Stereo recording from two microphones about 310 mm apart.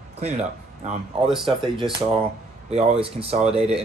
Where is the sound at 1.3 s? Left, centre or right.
Centre.